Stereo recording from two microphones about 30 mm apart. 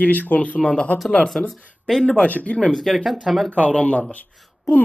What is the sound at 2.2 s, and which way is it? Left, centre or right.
Speech, left.